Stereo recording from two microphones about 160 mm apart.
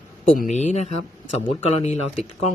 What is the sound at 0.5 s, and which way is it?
A man's voice, 45° left (ahead or behind).